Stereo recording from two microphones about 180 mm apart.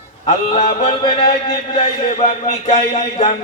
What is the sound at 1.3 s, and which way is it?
A man's voice, 50° left (ahead or behind).